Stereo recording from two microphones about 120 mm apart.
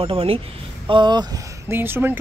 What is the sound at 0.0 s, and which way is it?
Speech, 50° right (ahead or behind).